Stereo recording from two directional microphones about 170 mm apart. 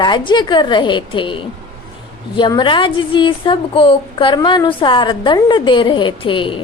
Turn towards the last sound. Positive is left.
turn(degrees=30)  # may be behind; listen again after turning